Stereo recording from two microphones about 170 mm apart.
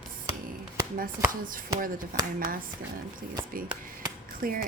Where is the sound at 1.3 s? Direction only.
55° right (ahead or behind).